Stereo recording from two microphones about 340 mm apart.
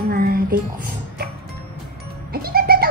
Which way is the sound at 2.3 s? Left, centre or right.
Right.